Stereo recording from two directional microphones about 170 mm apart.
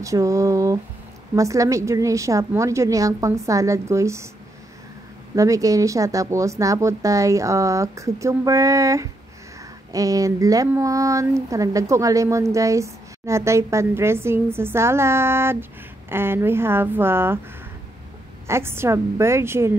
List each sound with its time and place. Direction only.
0.0 s speech: 20° right (ahead or behind)
5.3 s speech: 20° right (ahead or behind)
18.5 s speech: 15° right (ahead or behind)